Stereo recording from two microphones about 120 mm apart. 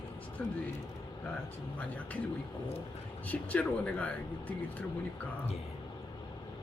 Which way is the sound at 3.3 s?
10° left (ahead or behind).